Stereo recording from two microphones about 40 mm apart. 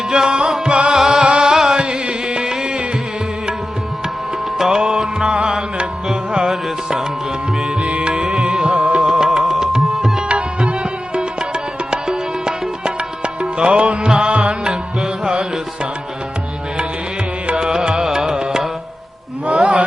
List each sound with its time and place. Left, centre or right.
0.1 s music: right
1.2 s music: right
4.5 s music: centre
10.2 s music: right
17.4 s music: right
19.5 s a sound: right